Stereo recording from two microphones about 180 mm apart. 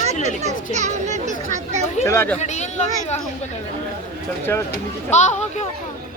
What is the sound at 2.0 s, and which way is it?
Speech, 15° left (ahead or behind).